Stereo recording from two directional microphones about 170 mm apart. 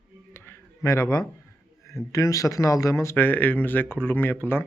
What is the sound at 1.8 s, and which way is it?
Speech, 15° left (ahead or behind).